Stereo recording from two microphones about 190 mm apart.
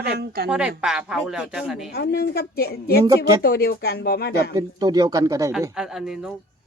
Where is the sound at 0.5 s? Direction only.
5° right (ahead or behind).